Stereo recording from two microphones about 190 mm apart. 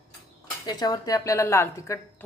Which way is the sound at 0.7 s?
20° left (ahead or behind).